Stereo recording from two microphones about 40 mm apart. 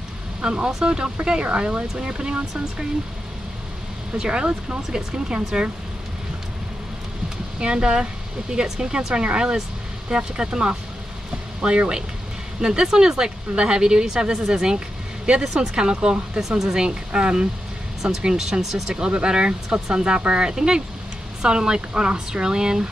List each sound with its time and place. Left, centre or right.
0.4 s speech: right
4.2 s speech: right
7.5 s speech: right
16.3 s speech: centre
18.9 s speech: right